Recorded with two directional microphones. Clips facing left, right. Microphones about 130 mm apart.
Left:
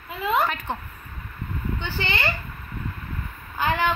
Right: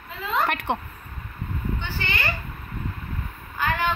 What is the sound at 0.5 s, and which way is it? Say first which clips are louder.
Speech: right 4 dB; 70° right (ahead or behind).